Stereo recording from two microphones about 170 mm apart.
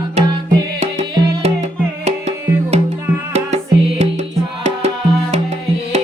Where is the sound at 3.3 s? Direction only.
40° right (ahead or behind).